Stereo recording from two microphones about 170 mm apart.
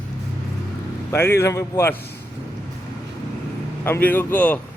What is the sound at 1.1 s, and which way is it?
Speech, 15° left (ahead or behind).